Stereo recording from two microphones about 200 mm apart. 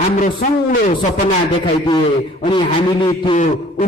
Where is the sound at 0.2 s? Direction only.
40° left (ahead or behind).